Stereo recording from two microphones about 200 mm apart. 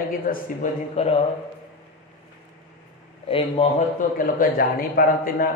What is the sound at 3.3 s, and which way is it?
Speech, 30° left (ahead or behind).